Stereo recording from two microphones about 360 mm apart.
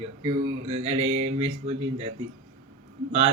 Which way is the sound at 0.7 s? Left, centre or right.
Centre.